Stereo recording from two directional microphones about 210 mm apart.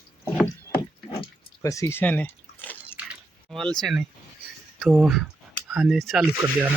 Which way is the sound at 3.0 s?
5° right (ahead or behind).